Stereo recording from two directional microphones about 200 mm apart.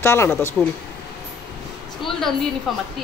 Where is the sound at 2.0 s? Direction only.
Centre (ahead or behind).